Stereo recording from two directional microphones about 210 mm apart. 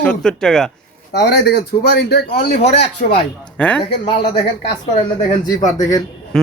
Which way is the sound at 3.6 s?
5° left (ahead or behind).